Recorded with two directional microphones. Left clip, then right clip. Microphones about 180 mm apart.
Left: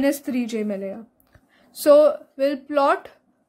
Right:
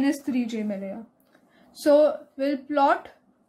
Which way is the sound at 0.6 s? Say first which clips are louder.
Left 4 dB; 30° left (ahead or behind).